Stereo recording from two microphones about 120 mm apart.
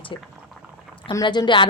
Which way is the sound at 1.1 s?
35° left (ahead or behind).